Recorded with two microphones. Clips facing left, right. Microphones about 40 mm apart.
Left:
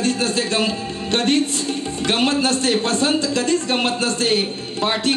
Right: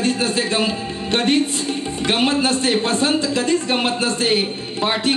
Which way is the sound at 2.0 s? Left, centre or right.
Centre.